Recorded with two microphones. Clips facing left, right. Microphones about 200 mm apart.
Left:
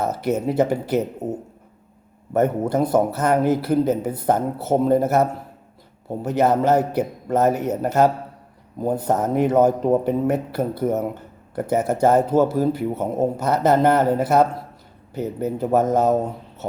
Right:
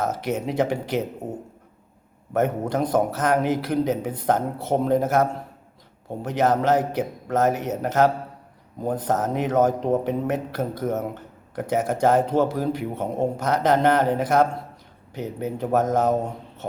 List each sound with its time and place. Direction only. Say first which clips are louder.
0.0 s a man's voice: left 3 dB; 10° left (ahead or behind)
2.3 s a man's voice: left 3 dB; 10° left (ahead or behind)